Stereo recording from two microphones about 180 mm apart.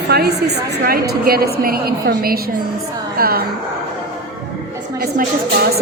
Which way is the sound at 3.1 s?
55° right (ahead or behind).